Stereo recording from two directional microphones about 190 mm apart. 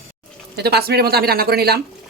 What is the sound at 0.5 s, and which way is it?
A woman's voice, 60° right (ahead or behind).